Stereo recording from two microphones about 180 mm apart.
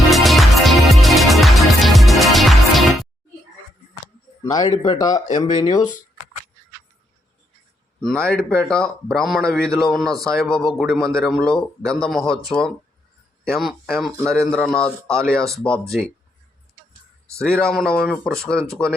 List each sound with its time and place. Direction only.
0.1 s music: centre (ahead or behind)
4.5 s speech: 20° left (ahead or behind)
8.0 s a man's voice: 5° left (ahead or behind)
17.6 s a man's voice: 5° left (ahead or behind)